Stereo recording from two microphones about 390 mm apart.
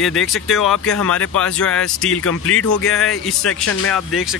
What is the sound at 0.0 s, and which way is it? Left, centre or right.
Speech, centre.